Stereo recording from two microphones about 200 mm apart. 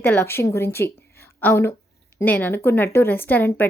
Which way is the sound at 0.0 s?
10° left (ahead or behind).